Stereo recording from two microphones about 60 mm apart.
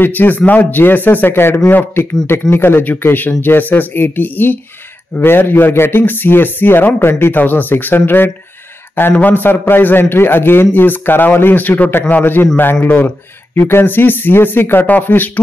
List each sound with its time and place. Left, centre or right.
0.0 s a man's voice: left